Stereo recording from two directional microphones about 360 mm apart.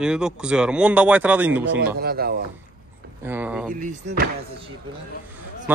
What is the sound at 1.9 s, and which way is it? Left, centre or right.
Speech, right.